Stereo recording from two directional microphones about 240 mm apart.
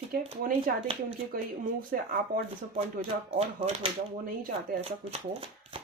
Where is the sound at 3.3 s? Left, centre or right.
Right.